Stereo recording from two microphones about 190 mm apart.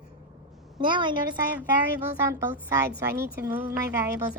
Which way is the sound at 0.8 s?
25° right (ahead or behind).